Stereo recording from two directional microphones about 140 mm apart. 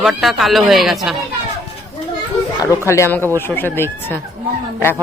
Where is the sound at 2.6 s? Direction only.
20° left (ahead or behind).